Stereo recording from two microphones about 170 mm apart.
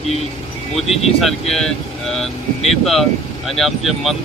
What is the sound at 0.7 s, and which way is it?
Speech, 35° left (ahead or behind).